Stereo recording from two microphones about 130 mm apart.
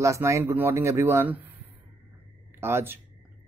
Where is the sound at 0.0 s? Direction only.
25° right (ahead or behind).